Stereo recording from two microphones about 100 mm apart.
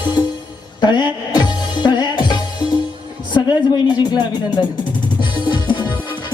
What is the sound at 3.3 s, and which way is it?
Speech, 45° left (ahead or behind).